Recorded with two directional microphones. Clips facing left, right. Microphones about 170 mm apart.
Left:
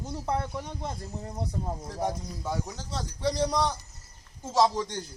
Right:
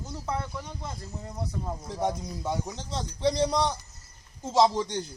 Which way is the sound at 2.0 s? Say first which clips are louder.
Right 2 dB; 20° right (ahead or behind).